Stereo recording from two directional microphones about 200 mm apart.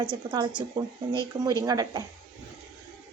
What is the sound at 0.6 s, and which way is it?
A woman's voice, 15° right (ahead or behind).